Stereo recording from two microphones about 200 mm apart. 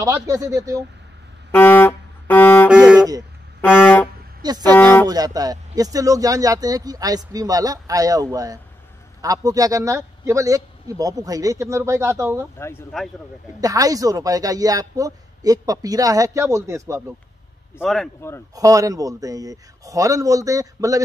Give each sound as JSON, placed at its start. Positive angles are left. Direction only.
{"t": 0.0, "sound": "speech", "side_deg": -15}
{"t": 1.5, "sound": "music", "side_deg": 10}
{"t": 2.7, "sound": "music", "side_deg": -5}
{"t": 3.0, "sound": "vehicle", "side_deg": -20}
{"t": 3.6, "sound": "vehicle", "side_deg": 10}
{"t": 4.4, "sound": "speech", "side_deg": -20}
{"t": 4.7, "sound": "vehicle", "side_deg": 10}
{"t": 5.0, "sound": "speech", "side_deg": -20}
{"t": 12.5, "sound": "vehicle", "side_deg": 10}
{"t": 13.6, "sound": "speech", "side_deg": -15}
{"t": 17.8, "sound": "speech", "side_deg": 0}
{"t": 18.5, "sound": "speech", "side_deg": -15}